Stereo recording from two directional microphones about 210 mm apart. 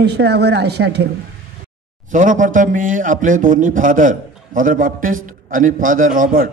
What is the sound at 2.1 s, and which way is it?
A man's voice, 40° right (ahead or behind).